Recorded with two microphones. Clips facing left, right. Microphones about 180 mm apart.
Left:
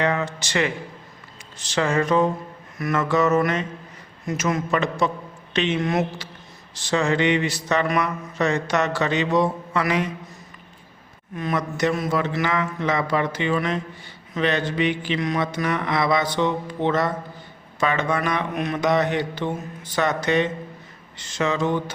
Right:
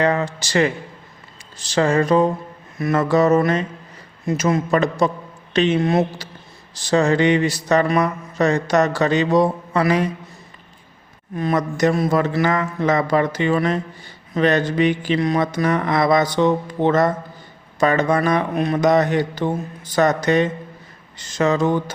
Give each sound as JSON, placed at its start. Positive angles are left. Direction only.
{"t": 0.0, "sound": "speech", "side_deg": -35}
{"t": 1.7, "sound": "speech", "side_deg": -35}
{"t": 11.3, "sound": "speech", "side_deg": -40}